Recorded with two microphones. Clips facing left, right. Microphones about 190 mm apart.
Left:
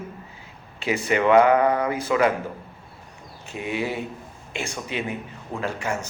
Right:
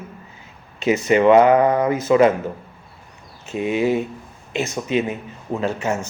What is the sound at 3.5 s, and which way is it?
Speech, 20° right (ahead or behind).